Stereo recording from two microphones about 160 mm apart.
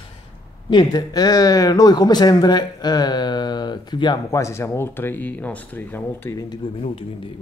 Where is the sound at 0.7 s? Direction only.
25° left (ahead or behind).